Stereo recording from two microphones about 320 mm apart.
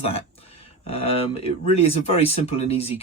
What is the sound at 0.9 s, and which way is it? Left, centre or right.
Speech, centre.